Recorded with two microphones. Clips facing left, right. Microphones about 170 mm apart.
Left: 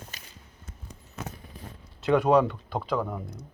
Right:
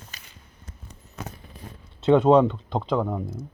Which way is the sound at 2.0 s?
25° right (ahead or behind).